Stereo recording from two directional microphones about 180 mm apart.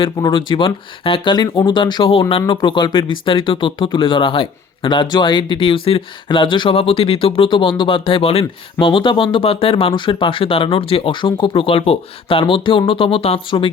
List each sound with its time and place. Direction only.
0.0 s speech: 25° left (ahead or behind)